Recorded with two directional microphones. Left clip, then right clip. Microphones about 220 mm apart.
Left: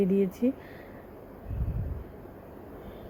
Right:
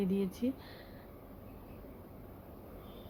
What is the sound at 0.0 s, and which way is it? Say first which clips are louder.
Speech: left 9 dB; 20° left (ahead or behind).